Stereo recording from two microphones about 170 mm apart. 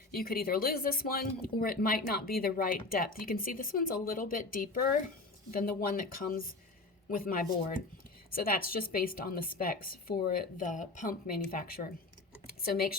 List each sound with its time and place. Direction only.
0.1 s speech: 60° left (ahead or behind)